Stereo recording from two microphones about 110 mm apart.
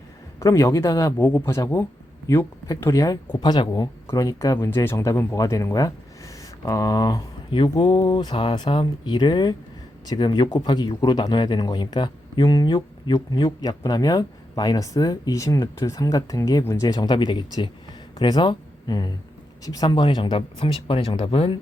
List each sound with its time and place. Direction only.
0.3 s speech: 25° left (ahead or behind)
4.0 s speech: 30° left (ahead or behind)
4.5 s speech: 25° left (ahead or behind); by 21.6 s 55° left (ahead or behind)